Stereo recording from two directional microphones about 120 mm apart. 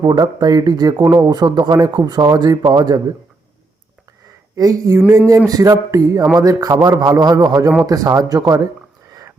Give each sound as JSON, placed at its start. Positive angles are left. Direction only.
{"t": 0.0, "sound": "a man's voice", "side_deg": -35}
{"t": 4.5, "sound": "a man's voice", "side_deg": -30}